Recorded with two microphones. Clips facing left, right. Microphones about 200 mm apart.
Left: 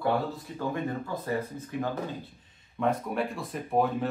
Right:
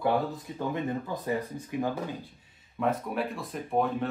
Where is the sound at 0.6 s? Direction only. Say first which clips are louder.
Right 1 dB; 20° right (ahead or behind).